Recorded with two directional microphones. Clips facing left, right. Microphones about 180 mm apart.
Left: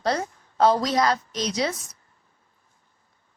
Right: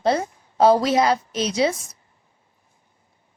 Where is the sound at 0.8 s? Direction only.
25° right (ahead or behind).